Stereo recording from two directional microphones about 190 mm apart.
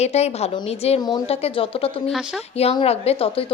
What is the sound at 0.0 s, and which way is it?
A woman's voice, 35° left (ahead or behind).